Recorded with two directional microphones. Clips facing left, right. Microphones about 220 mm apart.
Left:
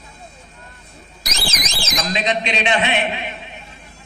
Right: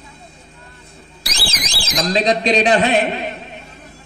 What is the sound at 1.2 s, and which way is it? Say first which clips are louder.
Alarm: even; 30° right (ahead or behind).